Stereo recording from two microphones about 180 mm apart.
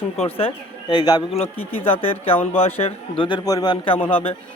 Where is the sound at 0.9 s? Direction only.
25° left (ahead or behind).